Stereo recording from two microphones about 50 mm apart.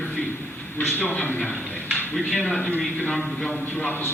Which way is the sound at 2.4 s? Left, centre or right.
Centre.